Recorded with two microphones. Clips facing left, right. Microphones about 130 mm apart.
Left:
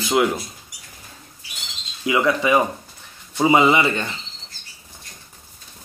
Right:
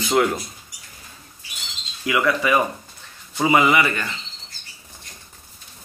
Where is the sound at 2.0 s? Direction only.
20° left (ahead or behind).